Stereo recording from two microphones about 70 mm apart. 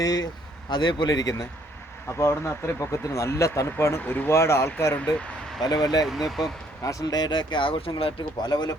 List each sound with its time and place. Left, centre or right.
0.0 s speech: left
0.8 s speech: left
2.0 s speech: left
5.6 s speech: left
6.1 s speech: centre
6.8 s speech: left
7.9 s speech: left
8.2 s speech: left